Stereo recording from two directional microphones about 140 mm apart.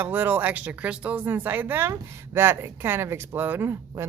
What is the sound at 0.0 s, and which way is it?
Speech, 15° right (ahead or behind).